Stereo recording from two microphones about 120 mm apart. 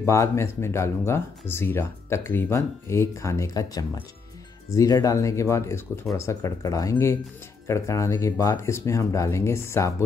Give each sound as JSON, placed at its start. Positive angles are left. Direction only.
{"t": 0.0, "sound": "speech", "side_deg": 25}